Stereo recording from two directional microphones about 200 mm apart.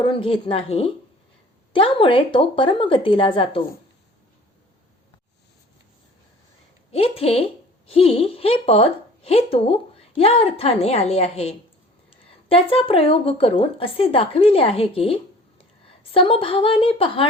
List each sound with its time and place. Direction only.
0.0 s speech: 25° left (ahead or behind)
6.9 s speech: 30° left (ahead or behind)